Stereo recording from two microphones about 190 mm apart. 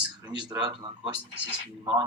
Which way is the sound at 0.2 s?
20° right (ahead or behind).